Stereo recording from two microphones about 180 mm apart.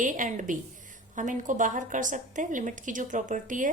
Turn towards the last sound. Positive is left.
turn(degrees=-45)  # may be behind; listen again after turning